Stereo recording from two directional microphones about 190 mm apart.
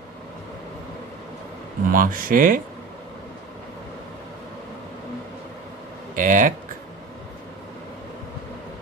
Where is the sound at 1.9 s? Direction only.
45° right (ahead or behind).